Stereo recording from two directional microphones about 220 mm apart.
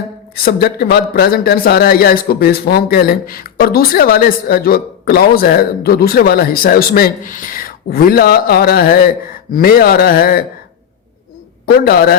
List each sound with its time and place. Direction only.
0.4 s a man's voice: 45° left (ahead or behind)
11.6 s a man's voice: 45° left (ahead or behind)